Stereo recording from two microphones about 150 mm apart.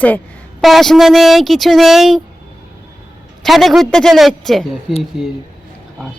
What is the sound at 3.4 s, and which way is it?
Speech, centre (ahead or behind).